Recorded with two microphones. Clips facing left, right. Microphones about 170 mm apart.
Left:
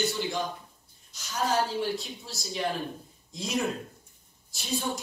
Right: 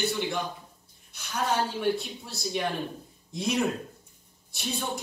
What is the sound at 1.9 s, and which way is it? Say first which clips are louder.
Speech: right 3 dB; 60° right (ahead or behind).